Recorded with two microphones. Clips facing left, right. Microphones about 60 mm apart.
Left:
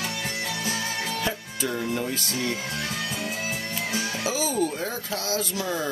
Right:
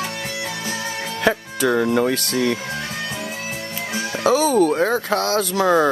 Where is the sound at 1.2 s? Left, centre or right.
Right.